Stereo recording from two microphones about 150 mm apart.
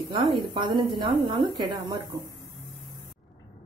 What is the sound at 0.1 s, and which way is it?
A woman's voice, 30° right (ahead or behind).